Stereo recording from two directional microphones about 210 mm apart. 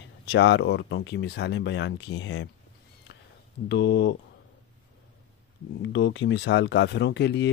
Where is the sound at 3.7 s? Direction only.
55° left (ahead or behind).